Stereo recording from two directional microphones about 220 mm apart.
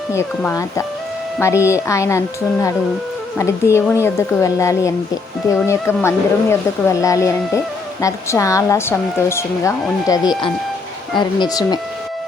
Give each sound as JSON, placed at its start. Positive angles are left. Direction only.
{"t": 0.1, "sound": "speech", "side_deg": 10}